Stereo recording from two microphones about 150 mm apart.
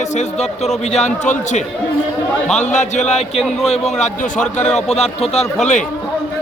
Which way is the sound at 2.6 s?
55° left (ahead or behind).